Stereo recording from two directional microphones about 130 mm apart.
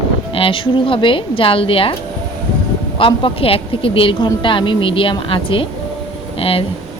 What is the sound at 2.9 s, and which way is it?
A woman's voice, 45° left (ahead or behind).